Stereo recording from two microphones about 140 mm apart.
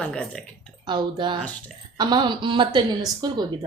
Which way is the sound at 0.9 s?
30° right (ahead or behind).